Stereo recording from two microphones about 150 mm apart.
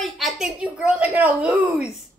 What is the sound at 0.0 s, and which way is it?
A child's voice, centre (ahead or behind).